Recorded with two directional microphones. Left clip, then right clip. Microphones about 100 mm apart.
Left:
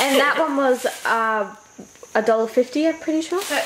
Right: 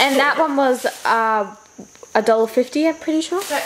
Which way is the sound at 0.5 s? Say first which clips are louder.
Right 2 dB; 25° right (ahead or behind).